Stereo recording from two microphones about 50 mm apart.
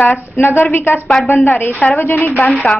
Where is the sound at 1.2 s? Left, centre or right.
Centre.